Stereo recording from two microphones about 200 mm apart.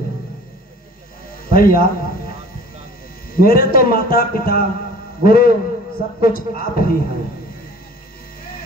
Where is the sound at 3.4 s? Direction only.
45° left (ahead or behind).